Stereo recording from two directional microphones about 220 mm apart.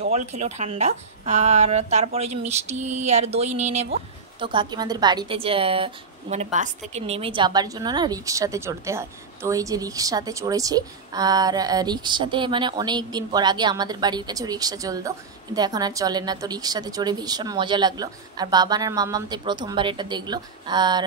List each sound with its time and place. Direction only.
0.1 s a woman's voice: 30° right (ahead or behind)